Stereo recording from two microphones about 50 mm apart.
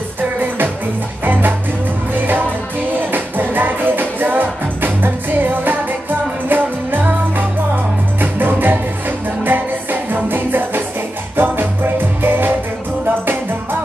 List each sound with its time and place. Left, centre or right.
1.2 s music: right